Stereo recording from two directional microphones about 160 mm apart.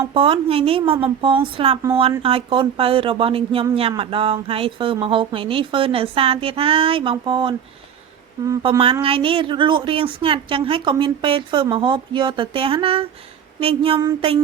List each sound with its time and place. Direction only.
0.1 s speech: 35° right (ahead or behind)
8.8 s speech: 35° right (ahead or behind)